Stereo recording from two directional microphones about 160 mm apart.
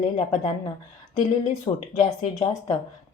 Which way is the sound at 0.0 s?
35° left (ahead or behind).